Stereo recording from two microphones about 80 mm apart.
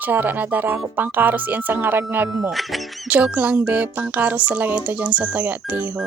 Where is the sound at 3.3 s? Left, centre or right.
Centre.